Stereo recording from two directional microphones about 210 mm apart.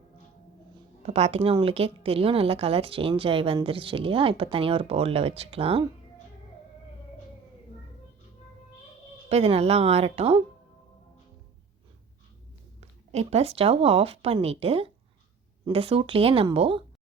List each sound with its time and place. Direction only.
1.0 s a woman's voice: 30° right (ahead or behind)
9.3 s a woman's voice: 30° right (ahead or behind)
12.8 s a woman's voice: 30° right (ahead or behind)